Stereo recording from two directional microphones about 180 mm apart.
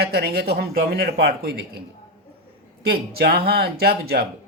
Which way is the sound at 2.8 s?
60° right (ahead or behind).